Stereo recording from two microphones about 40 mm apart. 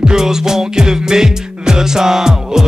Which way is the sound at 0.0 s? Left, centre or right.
Centre.